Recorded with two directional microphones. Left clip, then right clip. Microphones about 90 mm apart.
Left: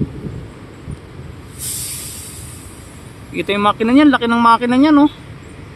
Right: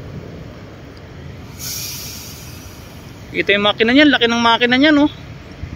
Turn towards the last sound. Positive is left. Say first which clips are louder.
# even
turn(degrees=30)  # may be behind; listen again after turning